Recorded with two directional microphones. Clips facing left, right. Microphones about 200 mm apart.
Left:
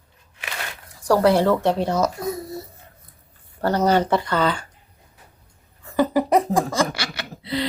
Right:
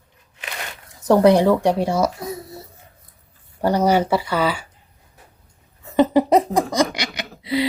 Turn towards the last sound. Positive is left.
turn(degrees=-10)  # may be behind; listen again after turning